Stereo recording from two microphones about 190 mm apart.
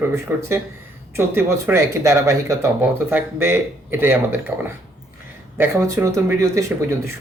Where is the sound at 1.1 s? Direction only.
15° right (ahead or behind).